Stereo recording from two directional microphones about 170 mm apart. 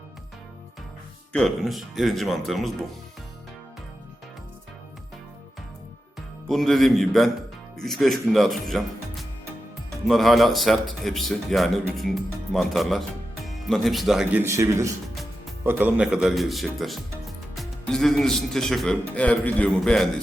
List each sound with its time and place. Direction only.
1.3 s a man's voice: centre (ahead or behind)
6.5 s a man's voice: centre (ahead or behind)
14.4 s a man's voice: 15° right (ahead or behind); by 20.2 s 5° left (ahead or behind)